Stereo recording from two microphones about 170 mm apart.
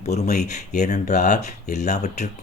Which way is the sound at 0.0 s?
40° left (ahead or behind).